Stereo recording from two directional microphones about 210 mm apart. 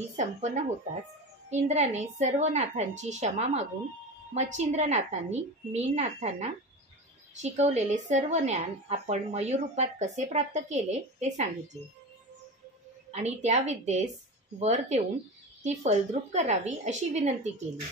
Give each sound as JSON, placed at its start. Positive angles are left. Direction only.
{"t": 0.1, "sound": "a woman's voice", "side_deg": -35}
{"t": 13.1, "sound": "a woman's voice", "side_deg": -30}